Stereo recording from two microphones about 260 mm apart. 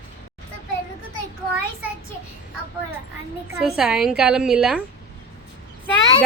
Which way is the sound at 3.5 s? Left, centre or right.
Centre.